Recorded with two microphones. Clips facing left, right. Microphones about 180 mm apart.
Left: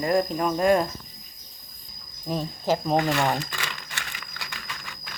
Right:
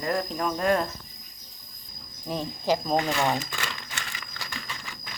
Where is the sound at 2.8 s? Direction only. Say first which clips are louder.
Left 2 dB; 5° left (ahead or behind).